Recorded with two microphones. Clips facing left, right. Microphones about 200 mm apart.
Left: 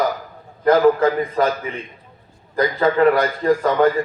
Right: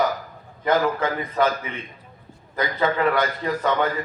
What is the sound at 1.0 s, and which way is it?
A man's voice, 40° left (ahead or behind).